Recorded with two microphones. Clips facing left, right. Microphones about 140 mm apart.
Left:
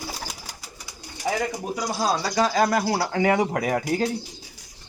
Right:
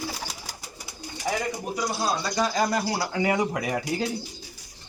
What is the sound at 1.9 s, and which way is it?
Speech, 60° left (ahead or behind).